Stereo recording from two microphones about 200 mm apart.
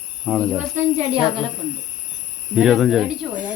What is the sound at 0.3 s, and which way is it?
Speech, centre (ahead or behind).